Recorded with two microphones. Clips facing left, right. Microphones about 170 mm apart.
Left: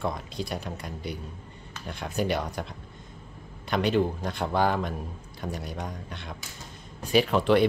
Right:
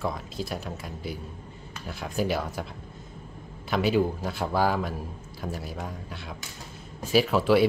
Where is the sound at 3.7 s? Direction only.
5° right (ahead or behind).